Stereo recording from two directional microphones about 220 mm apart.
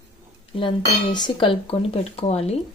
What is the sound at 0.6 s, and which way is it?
Speech, 20° left (ahead or behind).